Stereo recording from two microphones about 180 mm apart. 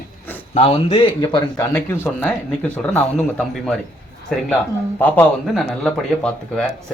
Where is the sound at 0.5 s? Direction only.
35° left (ahead or behind).